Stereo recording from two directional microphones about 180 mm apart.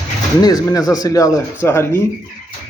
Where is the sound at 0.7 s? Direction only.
20° left (ahead or behind).